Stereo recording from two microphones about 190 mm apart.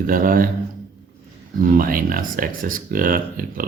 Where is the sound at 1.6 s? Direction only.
45° right (ahead or behind).